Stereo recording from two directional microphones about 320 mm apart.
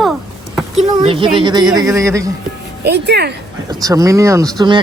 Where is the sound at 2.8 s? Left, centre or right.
Right.